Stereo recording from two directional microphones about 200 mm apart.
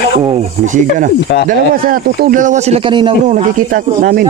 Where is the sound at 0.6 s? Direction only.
40° right (ahead or behind).